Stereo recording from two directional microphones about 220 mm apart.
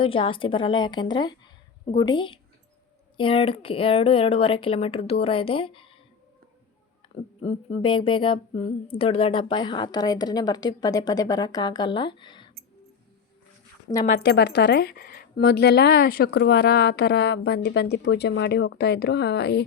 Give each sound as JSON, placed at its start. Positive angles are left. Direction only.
{"t": 0.0, "sound": "a woman's voice", "side_deg": 25}
{"t": 7.4, "sound": "a woman's voice", "side_deg": 25}
{"t": 14.2, "sound": "speech", "side_deg": 45}